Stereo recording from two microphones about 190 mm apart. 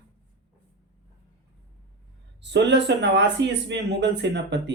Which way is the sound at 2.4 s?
65° right (ahead or behind).